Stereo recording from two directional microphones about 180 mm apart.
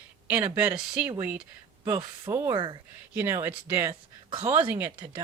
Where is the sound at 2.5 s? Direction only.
30° right (ahead or behind).